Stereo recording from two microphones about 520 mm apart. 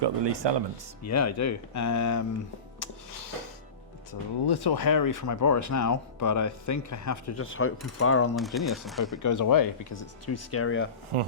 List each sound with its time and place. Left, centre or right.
0.0 s speech: right
1.0 s speech: left
4.4 s speech: left
8.4 s speech: centre
9.1 s speech: left
11.1 s speech: right